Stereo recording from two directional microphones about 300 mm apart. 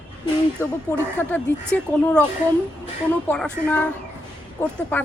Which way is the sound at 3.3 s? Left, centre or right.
Centre.